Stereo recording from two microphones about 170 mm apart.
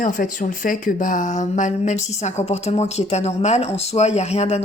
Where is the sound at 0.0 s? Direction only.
50° left (ahead or behind).